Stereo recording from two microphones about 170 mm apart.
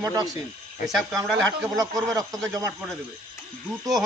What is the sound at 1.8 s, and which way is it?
Speech, 20° right (ahead or behind).